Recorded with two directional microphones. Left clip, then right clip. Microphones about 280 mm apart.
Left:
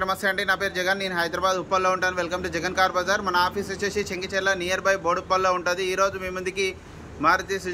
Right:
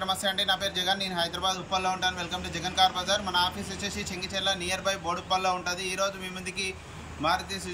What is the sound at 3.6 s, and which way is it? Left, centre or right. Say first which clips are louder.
Speech: left 8 dB; centre.